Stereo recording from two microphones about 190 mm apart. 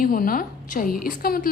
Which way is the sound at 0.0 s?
45° left (ahead or behind).